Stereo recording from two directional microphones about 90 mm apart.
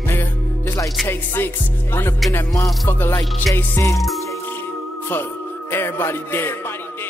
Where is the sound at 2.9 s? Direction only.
25° left (ahead or behind).